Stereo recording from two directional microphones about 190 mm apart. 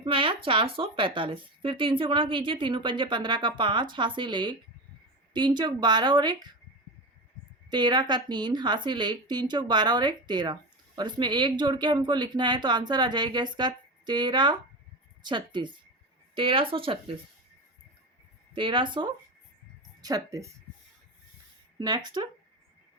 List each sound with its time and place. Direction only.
0.0 s a woman's voice: 25° right (ahead or behind)
7.7 s a woman's voice: 25° right (ahead or behind)
18.5 s a woman's voice: 25° right (ahead or behind)
21.8 s a woman's voice: 20° right (ahead or behind)